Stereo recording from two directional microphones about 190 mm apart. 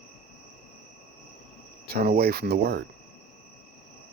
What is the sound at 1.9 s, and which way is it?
Speech, 50° right (ahead or behind).